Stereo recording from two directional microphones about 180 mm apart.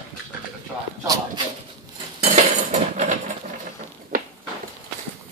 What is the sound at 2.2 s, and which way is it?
Cutlery, 40° right (ahead or behind).